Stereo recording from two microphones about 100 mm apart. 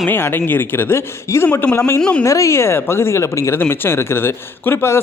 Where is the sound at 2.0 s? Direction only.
10° left (ahead or behind).